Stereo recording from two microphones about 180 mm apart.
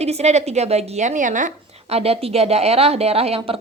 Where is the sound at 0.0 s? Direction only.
35° right (ahead or behind).